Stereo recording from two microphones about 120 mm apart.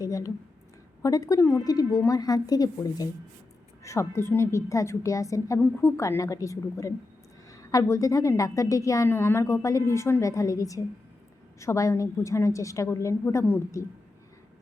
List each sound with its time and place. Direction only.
0.0 s a woman's voice: 30° left (ahead or behind)